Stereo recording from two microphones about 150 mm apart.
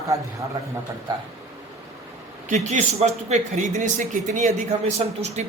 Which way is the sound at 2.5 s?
55° right (ahead or behind).